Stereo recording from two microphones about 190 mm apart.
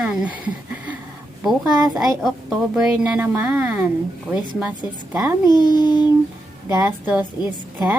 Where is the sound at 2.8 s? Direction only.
5° right (ahead or behind).